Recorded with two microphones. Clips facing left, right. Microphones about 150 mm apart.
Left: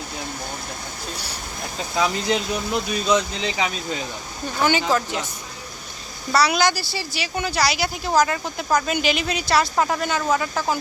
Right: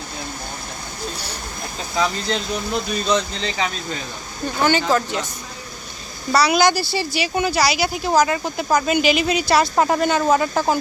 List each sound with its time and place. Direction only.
2.0 s speech: 10° left (ahead or behind)
6.3 s speech: centre (ahead or behind)
6.6 s speech: 20° right (ahead or behind)
7.1 s speech: 10° right (ahead or behind)
9.7 s speech: 35° right (ahead or behind)